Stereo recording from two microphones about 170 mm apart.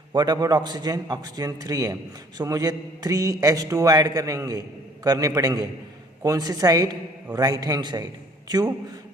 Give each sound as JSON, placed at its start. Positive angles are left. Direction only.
{"t": 0.1, "sound": "a man's voice", "side_deg": -25}